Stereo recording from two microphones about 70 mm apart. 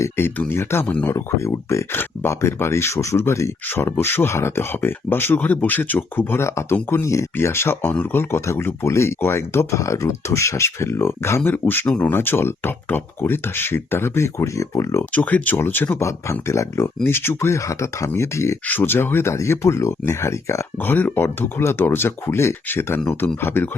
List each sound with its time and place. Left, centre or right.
0.0 s speech: left
7.0 s speech: left
7.3 s speech: left
11.9 s speech: centre
12.1 s speech: left
15.1 s speech: left
16.0 s speech: left
18.6 s speech: left
20.7 s speech: left